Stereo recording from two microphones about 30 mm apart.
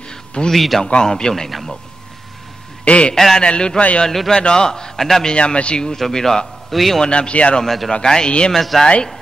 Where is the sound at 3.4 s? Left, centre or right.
Left.